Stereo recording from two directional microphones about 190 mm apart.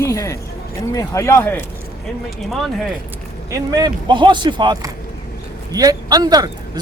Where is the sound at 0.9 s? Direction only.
15° left (ahead or behind).